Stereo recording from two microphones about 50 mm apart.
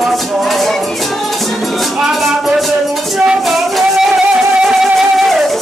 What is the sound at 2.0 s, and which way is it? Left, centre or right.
Music, centre.